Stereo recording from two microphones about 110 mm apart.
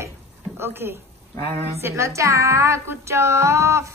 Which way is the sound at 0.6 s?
20° right (ahead or behind).